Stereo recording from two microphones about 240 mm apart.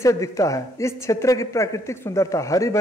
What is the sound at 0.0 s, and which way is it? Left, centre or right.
A man's voice, centre.